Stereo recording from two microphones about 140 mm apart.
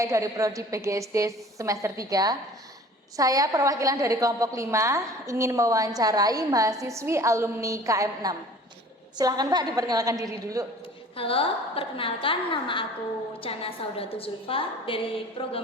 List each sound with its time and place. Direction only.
0.0 s a woman's voice: 20° right (ahead or behind)
11.2 s a woman's voice: 40° left (ahead or behind)